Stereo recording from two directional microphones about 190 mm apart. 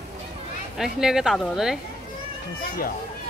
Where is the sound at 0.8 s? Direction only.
Centre (ahead or behind).